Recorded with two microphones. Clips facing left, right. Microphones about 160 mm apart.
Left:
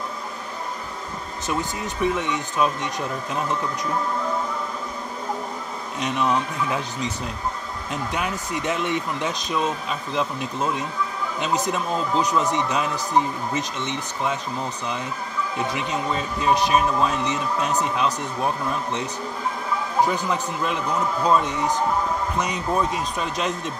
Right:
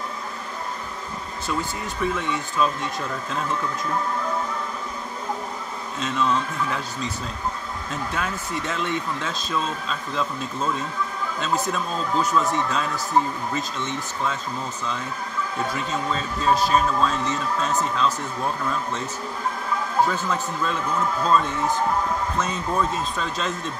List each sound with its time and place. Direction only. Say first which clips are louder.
1.5 s speech: left 1 dB; 20° left (ahead or behind)
5.9 s a man's voice: left 1 dB; 15° left (ahead or behind)
15.5 s a man's voice: left 1 dB; 15° left (ahead or behind)